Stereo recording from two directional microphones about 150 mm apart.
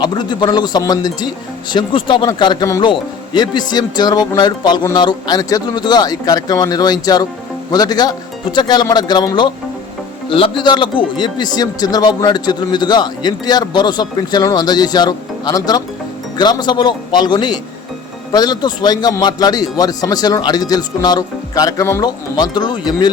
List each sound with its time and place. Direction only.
0.0 s speech: 30° left (ahead or behind)